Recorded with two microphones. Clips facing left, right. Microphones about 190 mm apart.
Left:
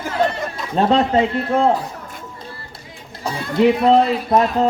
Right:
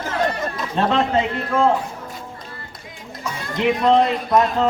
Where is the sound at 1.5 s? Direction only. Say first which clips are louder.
Even; 35° left (ahead or behind).